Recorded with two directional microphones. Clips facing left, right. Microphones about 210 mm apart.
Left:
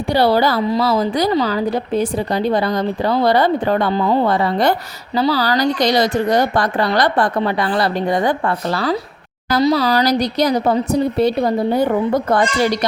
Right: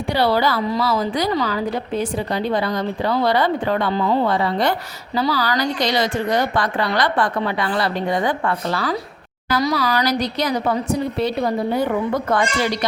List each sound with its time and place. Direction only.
0.1 s speech: 40° left (ahead or behind)